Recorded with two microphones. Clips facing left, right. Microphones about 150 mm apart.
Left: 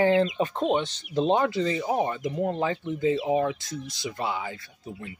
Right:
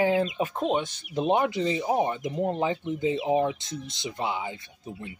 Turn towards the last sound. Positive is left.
turn(degrees=-20)  # may be behind; listen again after turning